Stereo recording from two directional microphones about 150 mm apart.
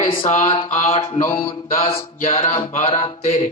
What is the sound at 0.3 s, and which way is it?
Music, 50° left (ahead or behind).